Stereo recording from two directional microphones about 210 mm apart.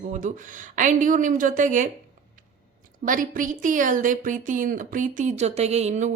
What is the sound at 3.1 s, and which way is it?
A woman's voice, 40° right (ahead or behind).